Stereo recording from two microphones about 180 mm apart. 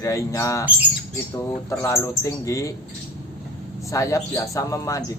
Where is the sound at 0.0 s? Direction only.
20° left (ahead or behind).